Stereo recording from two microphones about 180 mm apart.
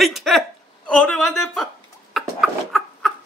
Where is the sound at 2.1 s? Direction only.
Centre (ahead or behind).